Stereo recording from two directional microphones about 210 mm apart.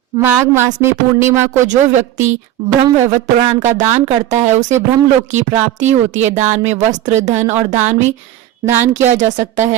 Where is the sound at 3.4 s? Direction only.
30° right (ahead or behind).